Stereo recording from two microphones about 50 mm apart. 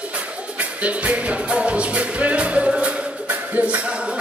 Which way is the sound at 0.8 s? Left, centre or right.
Right.